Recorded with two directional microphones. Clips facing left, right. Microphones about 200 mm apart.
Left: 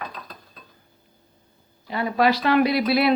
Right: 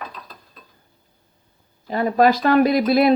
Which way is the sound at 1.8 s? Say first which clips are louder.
Right 4 dB; 45° right (ahead or behind).